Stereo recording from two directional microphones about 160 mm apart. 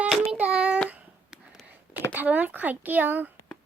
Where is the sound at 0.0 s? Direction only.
5° right (ahead or behind).